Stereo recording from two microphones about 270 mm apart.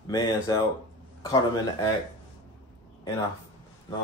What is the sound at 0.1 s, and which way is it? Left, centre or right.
Speech, centre.